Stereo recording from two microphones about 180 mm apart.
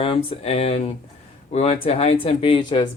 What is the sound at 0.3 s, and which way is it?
Speech, 35° left (ahead or behind).